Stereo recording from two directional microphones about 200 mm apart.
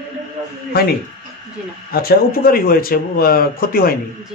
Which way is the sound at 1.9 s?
50° left (ahead or behind).